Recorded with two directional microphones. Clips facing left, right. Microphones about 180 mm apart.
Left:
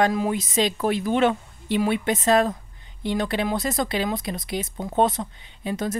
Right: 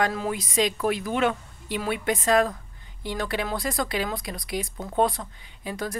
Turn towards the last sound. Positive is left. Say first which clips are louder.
# left 5 dB
turn(degrees=25)  # may be behind; listen again after turning